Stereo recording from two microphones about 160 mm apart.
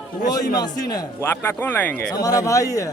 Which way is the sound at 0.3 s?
25° left (ahead or behind).